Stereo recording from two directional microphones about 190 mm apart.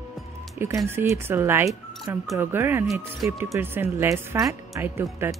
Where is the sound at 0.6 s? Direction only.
10° right (ahead or behind).